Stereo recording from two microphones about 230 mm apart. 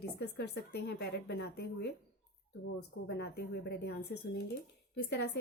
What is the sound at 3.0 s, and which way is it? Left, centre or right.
Speech, left.